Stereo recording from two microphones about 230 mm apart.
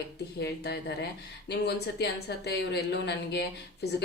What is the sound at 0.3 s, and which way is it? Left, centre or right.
Speech, left.